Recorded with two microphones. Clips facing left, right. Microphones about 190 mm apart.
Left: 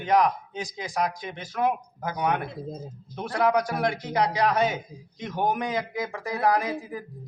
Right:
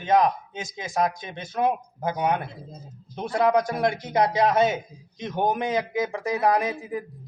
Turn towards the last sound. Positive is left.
turn(degrees=-20)  # may be behind; listen again after turning